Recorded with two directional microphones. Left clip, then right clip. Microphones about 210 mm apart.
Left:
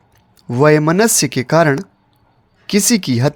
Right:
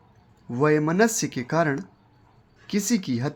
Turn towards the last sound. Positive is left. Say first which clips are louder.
# left 11 dB
turn(degrees=50)  # may be behind; listen again after turning